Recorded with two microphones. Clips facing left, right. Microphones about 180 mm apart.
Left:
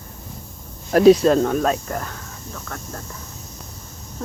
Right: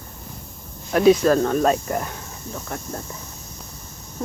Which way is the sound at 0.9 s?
35° left (ahead or behind).